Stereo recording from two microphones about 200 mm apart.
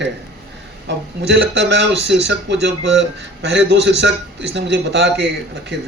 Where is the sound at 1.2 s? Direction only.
60° right (ahead or behind).